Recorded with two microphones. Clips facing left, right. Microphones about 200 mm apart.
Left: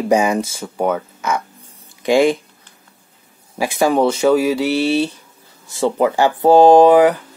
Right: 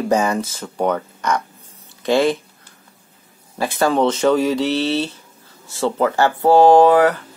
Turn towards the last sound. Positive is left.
turn(degrees=15)  # may be behind; listen again after turning